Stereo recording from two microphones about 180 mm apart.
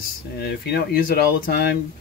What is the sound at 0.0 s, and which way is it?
Speech, 65° left (ahead or behind).